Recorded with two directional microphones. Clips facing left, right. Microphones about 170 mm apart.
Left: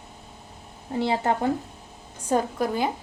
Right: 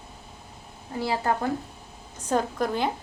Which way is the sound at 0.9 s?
25° left (ahead or behind).